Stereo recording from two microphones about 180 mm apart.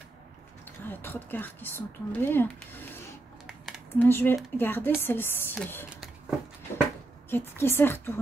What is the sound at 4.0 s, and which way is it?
A woman's voice, 10° left (ahead or behind).